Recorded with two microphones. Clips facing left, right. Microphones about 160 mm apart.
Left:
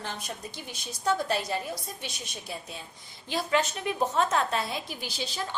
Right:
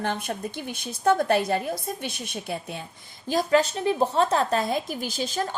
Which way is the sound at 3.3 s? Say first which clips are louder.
Right 6 dB; 40° right (ahead or behind).